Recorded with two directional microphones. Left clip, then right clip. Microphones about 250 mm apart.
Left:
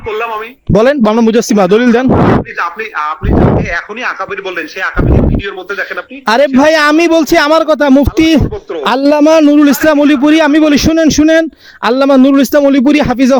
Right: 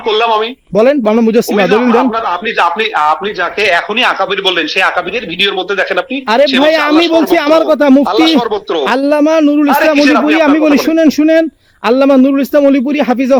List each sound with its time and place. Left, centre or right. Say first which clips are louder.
0.1 s speech: right 6 dB; centre
0.7 s a man's voice: left 1 dB; left
3.6 s speech: right 7 dB; centre
6.2 s a man's voice: left 2 dB; left